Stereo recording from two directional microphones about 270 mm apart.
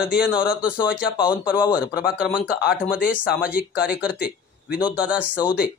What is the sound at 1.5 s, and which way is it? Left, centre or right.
Speech, centre.